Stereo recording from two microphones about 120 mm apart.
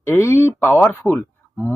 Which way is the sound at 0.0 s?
20° left (ahead or behind).